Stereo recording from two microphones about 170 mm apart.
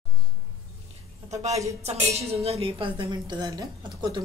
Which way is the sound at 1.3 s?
40° right (ahead or behind).